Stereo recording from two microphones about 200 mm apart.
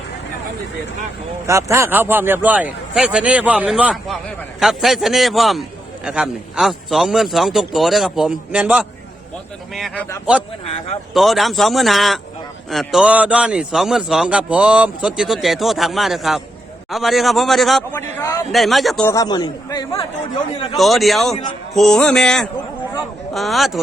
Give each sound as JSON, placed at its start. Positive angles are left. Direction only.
{"t": 1.5, "sound": "a man's voice", "side_deg": -15}
{"t": 17.9, "sound": "a man's voice", "side_deg": 15}
{"t": 18.5, "sound": "a man's voice", "side_deg": 0}
{"t": 19.1, "sound": "speech", "side_deg": 20}
{"t": 20.7, "sound": "a man's voice", "side_deg": 0}